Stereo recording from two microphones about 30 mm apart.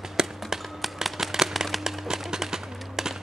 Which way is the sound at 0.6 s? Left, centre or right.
Centre.